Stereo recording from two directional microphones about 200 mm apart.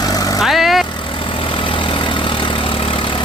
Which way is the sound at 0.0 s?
20° left (ahead or behind).